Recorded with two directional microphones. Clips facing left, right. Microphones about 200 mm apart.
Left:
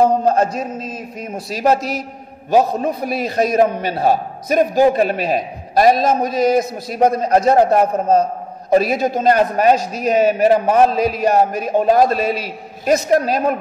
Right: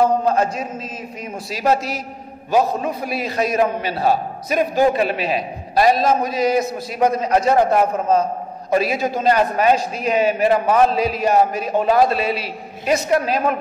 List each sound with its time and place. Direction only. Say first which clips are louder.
0.2 s mantra: left 2 dB; 40° left (ahead or behind)
1.3 s a man's voice: left 2 dB; 45° left (ahead or behind)